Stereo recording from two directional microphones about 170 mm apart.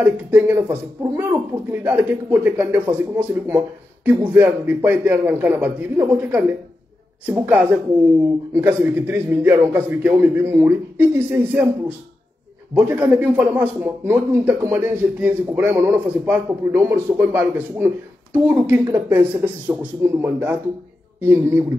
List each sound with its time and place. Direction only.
0.0 s speech: 10° right (ahead or behind)
12.7 s speech: 10° right (ahead or behind)